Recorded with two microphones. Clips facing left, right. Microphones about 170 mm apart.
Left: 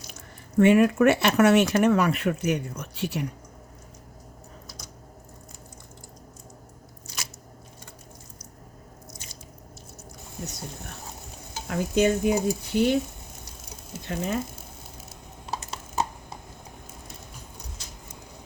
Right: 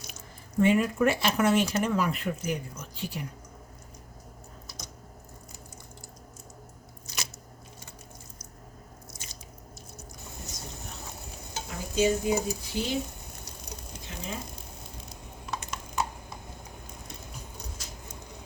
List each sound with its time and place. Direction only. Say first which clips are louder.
0.6 s speech: left 6 dB; 70° left (ahead or behind)
11.7 s speech: left 4 dB; 60° left (ahead or behind)
14.0 s speech: left 10 dB; 60° left (ahead or behind)
15.4 s a sound: left 2 dB; 35° left (ahead or behind)